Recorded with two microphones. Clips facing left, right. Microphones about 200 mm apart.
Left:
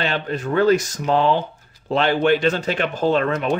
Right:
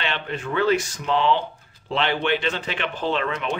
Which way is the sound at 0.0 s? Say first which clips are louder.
Left 5 dB; 40° left (ahead or behind).